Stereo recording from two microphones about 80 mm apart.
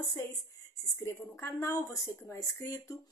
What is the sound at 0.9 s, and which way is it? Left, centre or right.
A woman's voice, left.